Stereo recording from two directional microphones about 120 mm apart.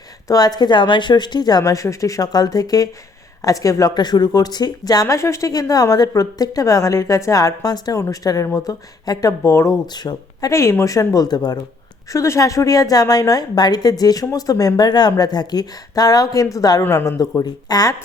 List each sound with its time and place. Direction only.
0.3 s a woman's voice: 35° left (ahead or behind)